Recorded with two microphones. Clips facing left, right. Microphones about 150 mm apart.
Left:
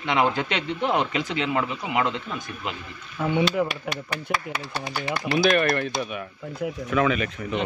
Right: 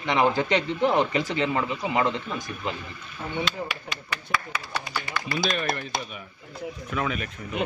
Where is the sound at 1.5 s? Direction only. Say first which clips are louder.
Even; 10° left (ahead or behind).